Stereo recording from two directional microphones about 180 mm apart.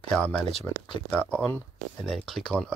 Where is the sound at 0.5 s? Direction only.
25° left (ahead or behind).